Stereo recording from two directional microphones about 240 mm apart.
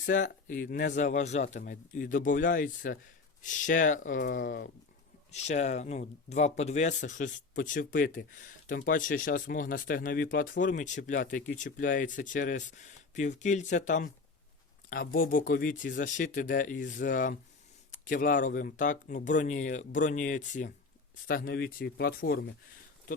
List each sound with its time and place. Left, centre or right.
0.0 s speech: left